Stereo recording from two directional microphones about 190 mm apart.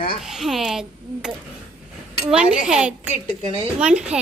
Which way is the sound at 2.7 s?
5° right (ahead or behind).